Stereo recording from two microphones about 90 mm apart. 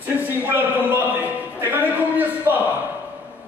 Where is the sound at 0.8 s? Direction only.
20° right (ahead or behind).